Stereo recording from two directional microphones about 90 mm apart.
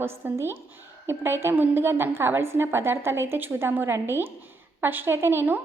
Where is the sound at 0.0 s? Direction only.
25° right (ahead or behind).